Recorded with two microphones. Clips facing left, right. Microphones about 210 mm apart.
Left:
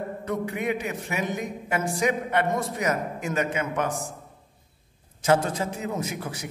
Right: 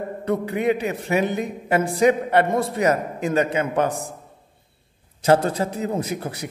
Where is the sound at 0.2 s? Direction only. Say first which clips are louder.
Right 7 dB; 35° right (ahead or behind).